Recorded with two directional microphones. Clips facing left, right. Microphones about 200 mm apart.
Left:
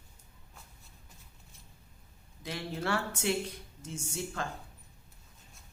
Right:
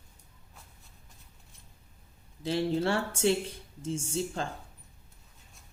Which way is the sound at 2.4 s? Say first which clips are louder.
Right 9 dB; 30° right (ahead or behind).